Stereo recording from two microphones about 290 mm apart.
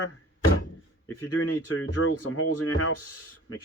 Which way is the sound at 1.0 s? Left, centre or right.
Left.